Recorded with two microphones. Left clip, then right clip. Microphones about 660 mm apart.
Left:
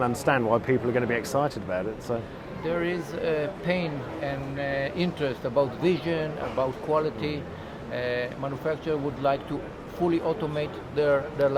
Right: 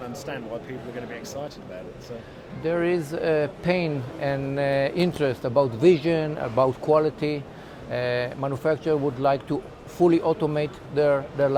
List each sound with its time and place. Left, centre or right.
0.1 s speech: left
2.6 s speech: right
7.9 s speech: right